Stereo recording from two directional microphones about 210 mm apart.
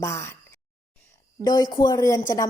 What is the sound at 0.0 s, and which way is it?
Speech, 15° left (ahead or behind).